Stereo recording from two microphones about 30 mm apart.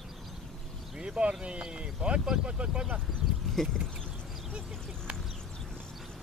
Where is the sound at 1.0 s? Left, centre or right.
Right.